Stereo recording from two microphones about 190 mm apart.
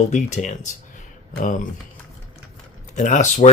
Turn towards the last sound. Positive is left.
turn(degrees=35)  # may be behind; listen again after turning